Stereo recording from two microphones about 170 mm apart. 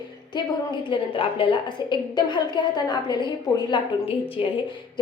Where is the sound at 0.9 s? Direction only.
30° left (ahead or behind).